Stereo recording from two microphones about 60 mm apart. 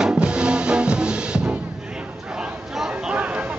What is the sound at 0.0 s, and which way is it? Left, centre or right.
Music, centre.